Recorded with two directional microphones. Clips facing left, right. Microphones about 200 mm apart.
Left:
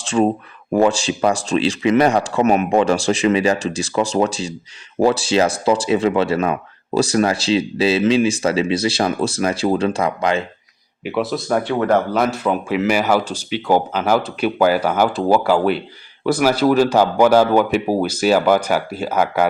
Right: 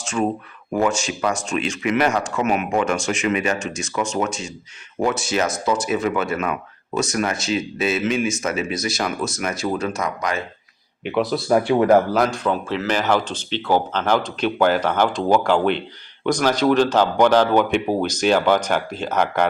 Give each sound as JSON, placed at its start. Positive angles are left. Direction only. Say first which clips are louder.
{"t": 0.0, "sound": "speech", "louder": "left 5 dB", "side_deg": 30}
{"t": 11.0, "sound": "speech", "louder": "even", "side_deg": 5}